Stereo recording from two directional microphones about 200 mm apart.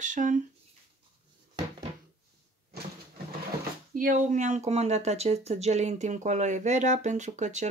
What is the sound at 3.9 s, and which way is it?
Speech, 45° right (ahead or behind).